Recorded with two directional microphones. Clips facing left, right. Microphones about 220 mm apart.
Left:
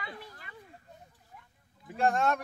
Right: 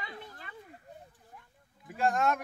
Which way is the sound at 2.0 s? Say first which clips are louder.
Left 1 dB; centre (ahead or behind).